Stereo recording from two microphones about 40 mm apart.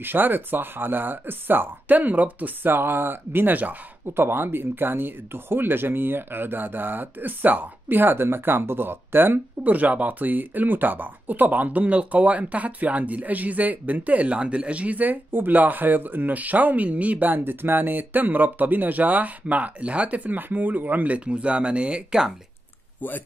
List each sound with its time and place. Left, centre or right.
0.0 s speech: right
2.6 s speech: right
4.0 s speech: right
9.6 s speech: right
22.9 s speech: left